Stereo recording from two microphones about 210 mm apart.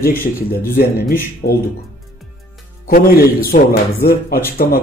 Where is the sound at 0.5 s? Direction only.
45° left (ahead or behind).